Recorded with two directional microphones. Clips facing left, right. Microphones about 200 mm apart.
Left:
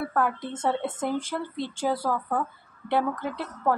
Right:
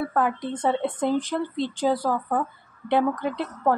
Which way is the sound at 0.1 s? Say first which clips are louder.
Right 2 dB; 20° right (ahead or behind).